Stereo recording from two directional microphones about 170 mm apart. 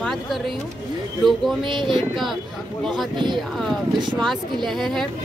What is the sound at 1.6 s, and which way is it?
Speech, 30° right (ahead or behind).